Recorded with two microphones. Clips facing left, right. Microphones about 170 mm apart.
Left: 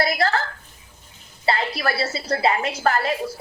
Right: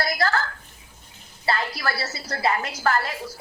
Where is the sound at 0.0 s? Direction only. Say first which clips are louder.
Left 3 dB; 25° left (ahead or behind).